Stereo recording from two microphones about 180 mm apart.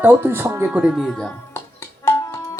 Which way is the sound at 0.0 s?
10° right (ahead or behind).